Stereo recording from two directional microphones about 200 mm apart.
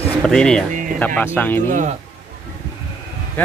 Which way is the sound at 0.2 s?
5° left (ahead or behind).